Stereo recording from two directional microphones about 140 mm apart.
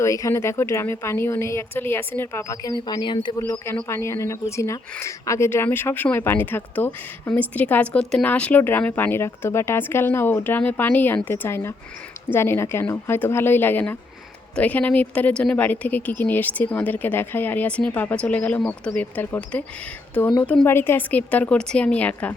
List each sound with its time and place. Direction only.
0.0 s a woman's voice: 20° left (ahead or behind)
3.7 s speech: 20° left (ahead or behind)